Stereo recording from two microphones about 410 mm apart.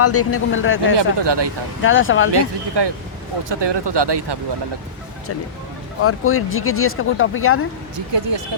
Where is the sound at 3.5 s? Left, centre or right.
Right.